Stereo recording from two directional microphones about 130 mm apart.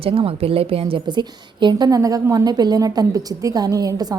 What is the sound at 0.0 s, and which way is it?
A woman's voice, 45° right (ahead or behind).